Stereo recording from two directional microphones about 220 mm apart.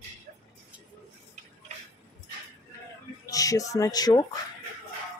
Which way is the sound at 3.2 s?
15° left (ahead or behind).